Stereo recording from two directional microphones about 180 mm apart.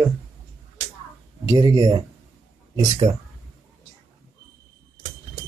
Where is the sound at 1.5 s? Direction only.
25° right (ahead or behind).